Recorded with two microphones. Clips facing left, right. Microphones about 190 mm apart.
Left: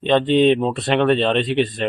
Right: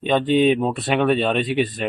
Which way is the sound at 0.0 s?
5° right (ahead or behind).